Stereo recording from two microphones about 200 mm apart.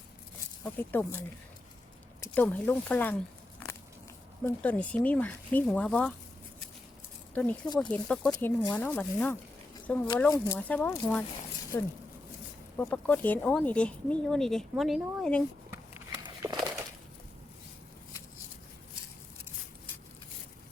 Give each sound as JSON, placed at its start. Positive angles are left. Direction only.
{"t": 0.6, "sound": "speech", "side_deg": 10}
{"t": 2.2, "sound": "speech", "side_deg": 10}
{"t": 4.4, "sound": "speech", "side_deg": 10}
{"t": 7.3, "sound": "speech", "side_deg": 5}
{"t": 16.2, "sound": "a sound", "side_deg": -20}